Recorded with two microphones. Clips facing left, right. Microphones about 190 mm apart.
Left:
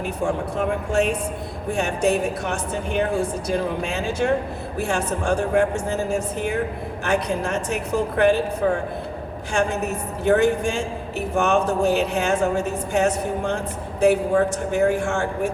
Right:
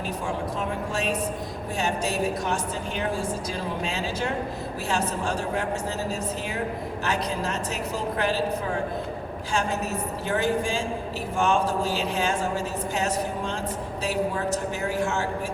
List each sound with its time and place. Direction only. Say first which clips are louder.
0.3 s a woman's voice: left 6 dB; 55° left (ahead or behind)
9.5 s a woman's voice: left 5 dB; 60° left (ahead or behind)